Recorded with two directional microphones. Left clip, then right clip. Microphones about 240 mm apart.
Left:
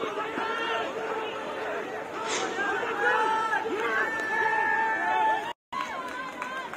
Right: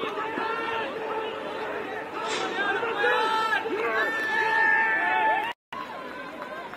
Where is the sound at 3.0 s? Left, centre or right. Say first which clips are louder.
Right 1 dB; centre.